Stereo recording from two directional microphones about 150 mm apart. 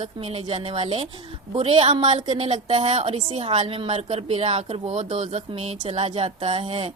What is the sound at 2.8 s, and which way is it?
A woman's voice, 45° right (ahead or behind).